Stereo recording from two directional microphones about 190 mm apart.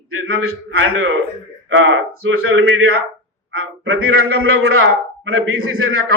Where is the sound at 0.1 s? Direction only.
90° right.